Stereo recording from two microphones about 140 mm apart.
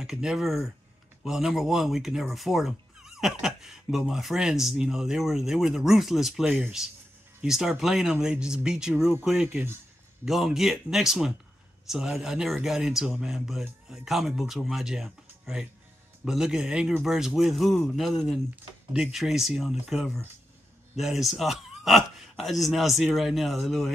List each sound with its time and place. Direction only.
0.0 s speech: 5° right (ahead or behind)
10.2 s speech: centre (ahead or behind)